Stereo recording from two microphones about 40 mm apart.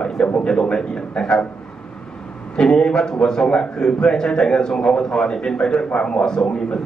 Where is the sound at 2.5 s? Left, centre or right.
Centre.